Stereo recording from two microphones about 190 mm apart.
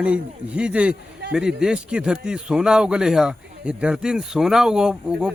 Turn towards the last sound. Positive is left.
turn(degrees=-5)  # may be behind; listen again after turning